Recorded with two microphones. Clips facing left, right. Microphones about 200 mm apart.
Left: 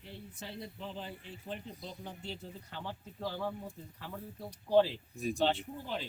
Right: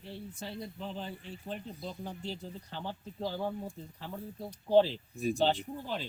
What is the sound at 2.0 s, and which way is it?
Speech, 35° right (ahead or behind).